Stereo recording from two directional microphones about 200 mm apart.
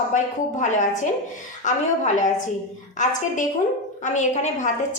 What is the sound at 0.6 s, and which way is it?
Speech, 35° left (ahead or behind).